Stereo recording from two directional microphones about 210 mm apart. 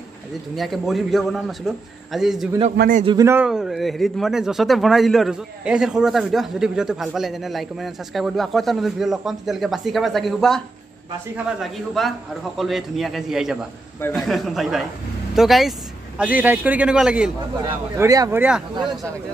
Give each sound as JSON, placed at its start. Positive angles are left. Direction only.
{"t": 0.6, "sound": "speech", "side_deg": 0}
{"t": 2.8, "sound": "a man's voice", "side_deg": -40}
{"t": 3.1, "sound": "a man's voice", "side_deg": -15}
{"t": 17.9, "sound": "a man's voice", "side_deg": -15}